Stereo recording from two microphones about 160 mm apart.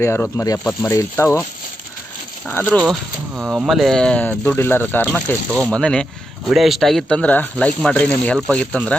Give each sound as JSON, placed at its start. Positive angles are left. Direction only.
{"t": 0.0, "sound": "speech", "side_deg": 15}
{"t": 2.4, "sound": "speech", "side_deg": 10}
{"t": 2.8, "sound": "speech", "side_deg": -5}